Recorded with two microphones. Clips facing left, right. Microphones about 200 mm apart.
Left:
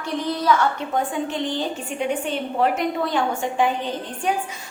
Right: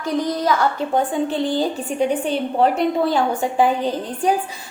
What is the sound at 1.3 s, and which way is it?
A woman's voice, 35° right (ahead or behind).